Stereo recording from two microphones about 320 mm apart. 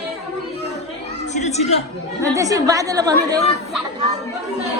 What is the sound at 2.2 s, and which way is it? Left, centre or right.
A woman's voice, centre.